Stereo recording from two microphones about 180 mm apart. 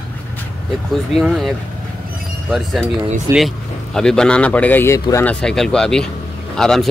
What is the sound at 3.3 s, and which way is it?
Speech, 15° right (ahead or behind).